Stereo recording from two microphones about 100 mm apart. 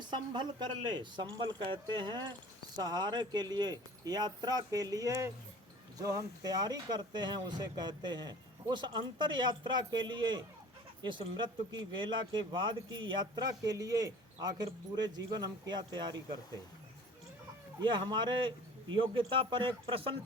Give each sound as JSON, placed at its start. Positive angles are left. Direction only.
{"t": 0.0, "sound": "speech", "side_deg": -50}
{"t": 17.7, "sound": "speech", "side_deg": -50}